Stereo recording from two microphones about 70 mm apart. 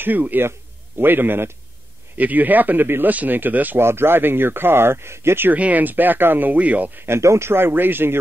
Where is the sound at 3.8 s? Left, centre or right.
Right.